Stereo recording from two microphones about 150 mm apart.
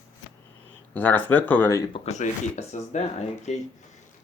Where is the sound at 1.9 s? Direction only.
50° left (ahead or behind).